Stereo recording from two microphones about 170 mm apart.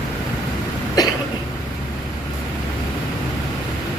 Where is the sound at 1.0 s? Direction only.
25° left (ahead or behind).